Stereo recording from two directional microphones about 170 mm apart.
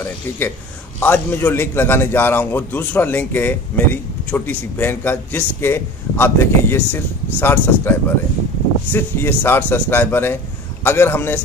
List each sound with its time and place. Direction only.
0.9 s a man's voice: 10° left (ahead or behind)
8.9 s a man's voice: 15° left (ahead or behind)